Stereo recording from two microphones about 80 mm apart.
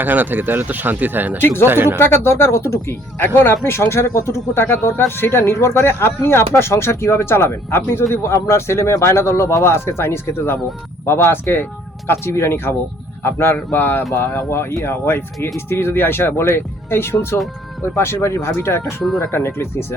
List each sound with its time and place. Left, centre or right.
0.0 s speech: right
2.0 s speech: left